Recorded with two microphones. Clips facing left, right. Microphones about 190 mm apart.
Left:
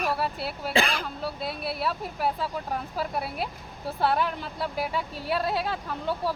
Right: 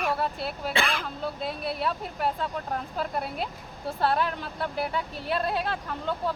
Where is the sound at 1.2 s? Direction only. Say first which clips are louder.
Right 2 dB; 5° left (ahead or behind).